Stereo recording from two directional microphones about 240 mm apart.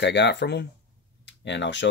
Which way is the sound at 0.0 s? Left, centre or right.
Left.